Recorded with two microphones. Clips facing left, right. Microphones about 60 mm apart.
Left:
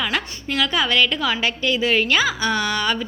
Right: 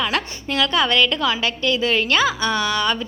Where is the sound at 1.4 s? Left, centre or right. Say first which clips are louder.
Even; centre.